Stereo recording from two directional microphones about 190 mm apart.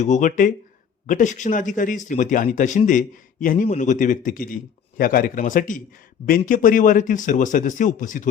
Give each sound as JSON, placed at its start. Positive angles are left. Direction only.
{"t": 0.0, "sound": "speech", "side_deg": 40}